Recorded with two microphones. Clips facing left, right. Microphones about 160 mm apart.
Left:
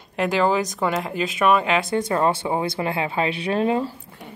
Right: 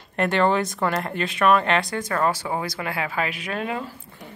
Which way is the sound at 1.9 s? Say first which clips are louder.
Left 3 dB; 25° left (ahead or behind).